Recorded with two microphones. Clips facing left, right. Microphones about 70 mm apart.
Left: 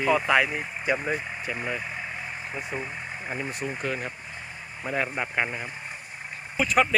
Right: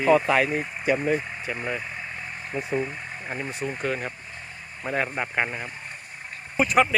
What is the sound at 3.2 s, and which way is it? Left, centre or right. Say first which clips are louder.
Speech: right 1 dB; centre.